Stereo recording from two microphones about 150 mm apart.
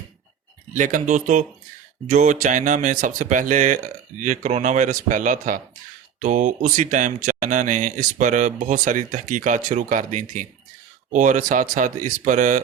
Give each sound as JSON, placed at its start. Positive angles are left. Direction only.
{"t": 0.7, "sound": "speech", "side_deg": -60}